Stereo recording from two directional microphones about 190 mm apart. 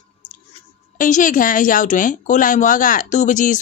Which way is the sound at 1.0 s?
45° left (ahead or behind).